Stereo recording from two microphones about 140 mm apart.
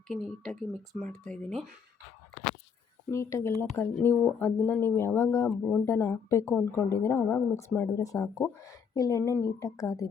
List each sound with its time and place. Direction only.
0.1 s speech: 5° left (ahead or behind)
3.1 s a woman's voice: 20° left (ahead or behind)